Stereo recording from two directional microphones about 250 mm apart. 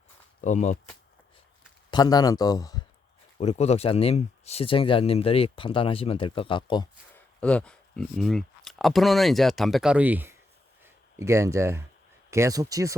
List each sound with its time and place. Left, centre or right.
0.4 s speech: left
1.9 s speech: centre
3.3 s speech: left
7.4 s speech: centre